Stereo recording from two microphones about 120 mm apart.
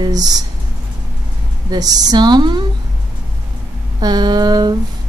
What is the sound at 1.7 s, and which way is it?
Speech, 35° right (ahead or behind).